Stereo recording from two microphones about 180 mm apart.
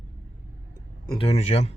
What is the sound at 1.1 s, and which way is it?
Speech, 30° left (ahead or behind).